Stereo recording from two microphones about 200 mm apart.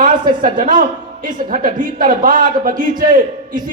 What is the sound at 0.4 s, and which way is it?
A man's voice, 45° right (ahead or behind).